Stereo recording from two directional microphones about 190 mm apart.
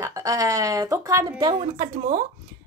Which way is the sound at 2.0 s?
35° right (ahead or behind).